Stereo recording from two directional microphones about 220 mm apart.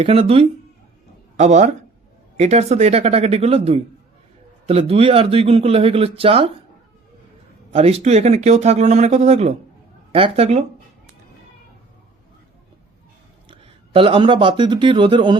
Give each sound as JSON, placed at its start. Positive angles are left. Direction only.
{"t": 0.0, "sound": "speech", "side_deg": -25}
{"t": 7.7, "sound": "speech", "side_deg": -25}
{"t": 13.5, "sound": "a man's voice", "side_deg": -25}